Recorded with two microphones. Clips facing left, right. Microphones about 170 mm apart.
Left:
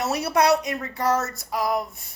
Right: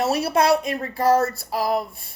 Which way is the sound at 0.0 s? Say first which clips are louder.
Right 2 dB; 30° right (ahead or behind).